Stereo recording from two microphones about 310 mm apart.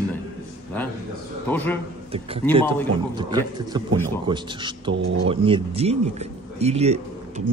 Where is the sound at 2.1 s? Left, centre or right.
Centre.